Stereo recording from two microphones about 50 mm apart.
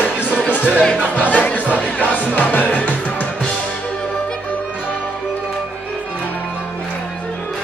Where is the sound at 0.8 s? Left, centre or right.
Left.